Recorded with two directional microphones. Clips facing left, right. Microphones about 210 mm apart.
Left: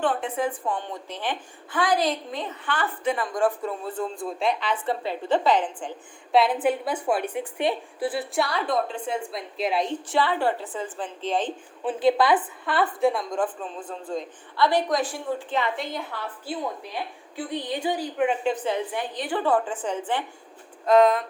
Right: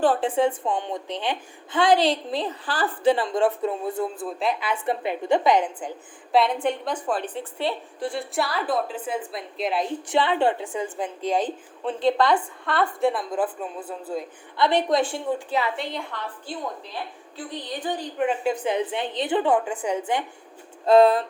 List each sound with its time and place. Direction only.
0.0 s a woman's voice: 35° right (ahead or behind); by 1.8 s 15° right (ahead or behind)
1.8 s a woman's voice: 30° right (ahead or behind); by 5.9 s 10° right (ahead or behind)
6.3 s a woman's voice: 5° left (ahead or behind)
8.0 s a woman's voice: 5° left (ahead or behind)
10.1 s a woman's voice: 20° right (ahead or behind)
11.8 s a woman's voice: 5° left (ahead or behind)
14.5 s a woman's voice: 20° right (ahead or behind)
15.4 s a woman's voice: 5° right (ahead or behind)
18.4 s a woman's voice: 15° right (ahead or behind)
20.8 s speech: 30° right (ahead or behind)